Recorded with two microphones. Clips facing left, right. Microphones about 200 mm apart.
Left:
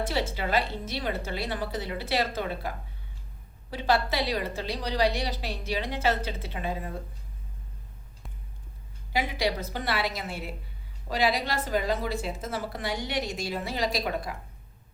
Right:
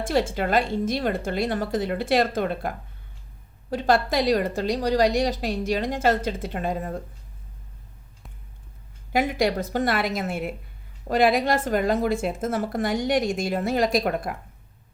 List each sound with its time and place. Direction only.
0.0 s a woman's voice: 50° right (ahead or behind)
9.1 s a woman's voice: 50° right (ahead or behind)